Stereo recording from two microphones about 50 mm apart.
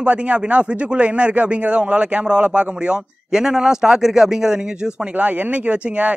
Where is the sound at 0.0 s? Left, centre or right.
Right.